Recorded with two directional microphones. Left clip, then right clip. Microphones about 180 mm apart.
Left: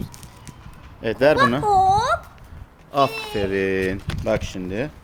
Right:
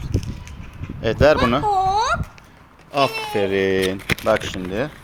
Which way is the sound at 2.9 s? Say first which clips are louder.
Even; 10° left (ahead or behind).